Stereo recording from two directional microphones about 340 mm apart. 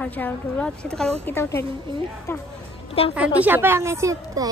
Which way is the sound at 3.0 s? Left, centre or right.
Centre.